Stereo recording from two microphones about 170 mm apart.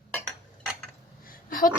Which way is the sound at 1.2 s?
55° left (ahead or behind).